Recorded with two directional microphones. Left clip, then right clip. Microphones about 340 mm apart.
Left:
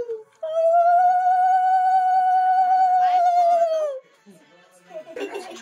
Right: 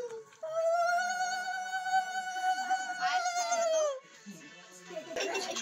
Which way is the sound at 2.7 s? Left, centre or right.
Centre.